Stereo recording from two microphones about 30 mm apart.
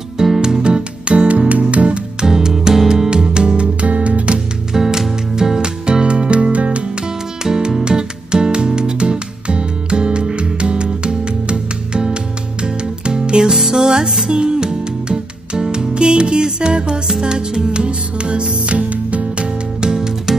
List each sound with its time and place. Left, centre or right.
0.4 s music: right
2.2 s music: centre
3.5 s music: right
4.7 s music: centre
5.9 s music: right
7.4 s music: right
13.5 s music: centre
17.8 s music: right